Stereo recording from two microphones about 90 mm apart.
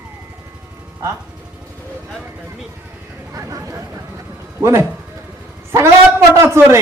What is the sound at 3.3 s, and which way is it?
Speech, 35° right (ahead or behind).